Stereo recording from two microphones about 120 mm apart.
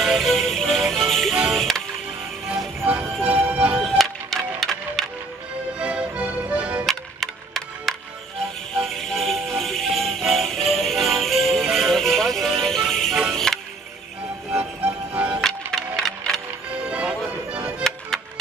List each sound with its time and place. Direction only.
0.0 s music: centre (ahead or behind)
3.2 s music: 50° right (ahead or behind)
3.4 s music: 10° right (ahead or behind)
3.8 s music: centre (ahead or behind)
5.8 s music: 10° right (ahead or behind)
6.9 s music: centre (ahead or behind)
9.6 s jingle bell: centre (ahead or behind)
12.6 s music: 5° left (ahead or behind)
14.5 s music: 10° right (ahead or behind)
15.4 s music: 5° left (ahead or behind)
16.8 s music: 10° right (ahead or behind)